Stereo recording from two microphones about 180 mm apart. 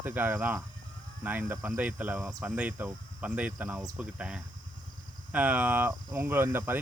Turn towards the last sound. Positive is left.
turn(degrees=-15)  # may be behind; listen again after turning